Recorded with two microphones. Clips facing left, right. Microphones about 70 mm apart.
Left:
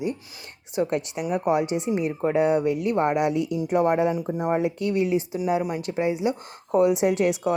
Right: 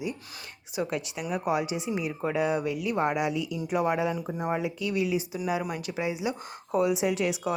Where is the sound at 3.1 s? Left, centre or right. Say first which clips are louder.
Left 5 dB; left.